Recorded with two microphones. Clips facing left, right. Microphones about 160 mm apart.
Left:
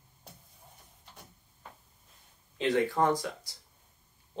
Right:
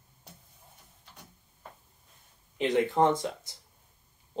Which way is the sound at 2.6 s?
20° right (ahead or behind).